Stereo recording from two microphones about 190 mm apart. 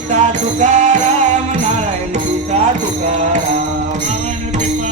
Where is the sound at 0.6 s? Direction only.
40° right (ahead or behind).